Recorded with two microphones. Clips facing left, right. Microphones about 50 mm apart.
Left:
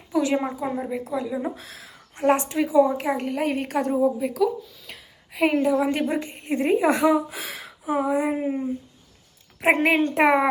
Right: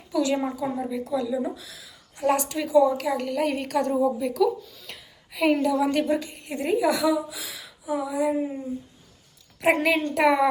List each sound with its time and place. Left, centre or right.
0.1 s a woman's voice: left
1.5 s a woman's voice: left
3.3 s a woman's voice: centre
4.9 s a sound: centre
5.4 s a woman's voice: left